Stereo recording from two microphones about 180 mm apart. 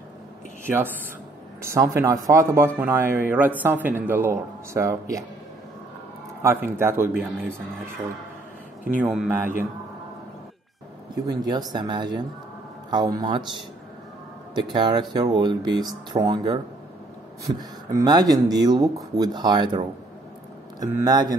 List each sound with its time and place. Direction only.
0.7 s speech: 10° right (ahead or behind)
6.4 s speech: 10° right (ahead or behind)
9.0 s speech: 5° right (ahead or behind)
11.1 s speech: 20° right (ahead or behind)
17.6 s speech: 20° right (ahead or behind)
20.8 s speech: 20° right (ahead or behind)